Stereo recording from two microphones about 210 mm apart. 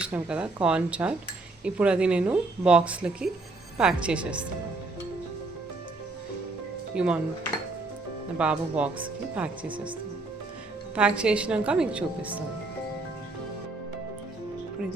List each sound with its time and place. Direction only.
0.0 s speech: 5° right (ahead or behind)
6.9 s speech: 5° right (ahead or behind)
8.4 s speech: 5° right (ahead or behind)
9.6 s speech: 25° right (ahead or behind)
10.9 s speech: 5° right (ahead or behind)